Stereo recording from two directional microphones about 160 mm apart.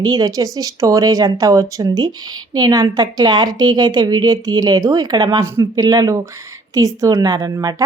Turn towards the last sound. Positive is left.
turn(degrees=-25)  # may be behind; listen again after turning